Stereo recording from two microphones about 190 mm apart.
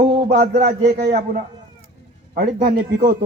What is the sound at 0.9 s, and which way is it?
Speech, 60° right (ahead or behind).